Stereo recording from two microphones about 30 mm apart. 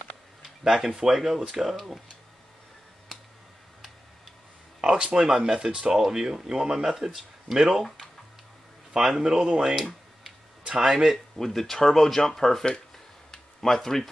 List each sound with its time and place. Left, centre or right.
0.4 s a sound: centre
1.1 s speech: centre
3.1 s a sound: centre
4.9 s speech: right; by 7.8 s centre
8.9 s speech: centre
9.6 s speech: centre
10.9 s speech: centre
11.3 s speech: centre
13.3 s a sound: centre